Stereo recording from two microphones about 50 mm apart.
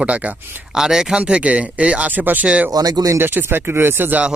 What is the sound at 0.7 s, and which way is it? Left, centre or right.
Speech, centre.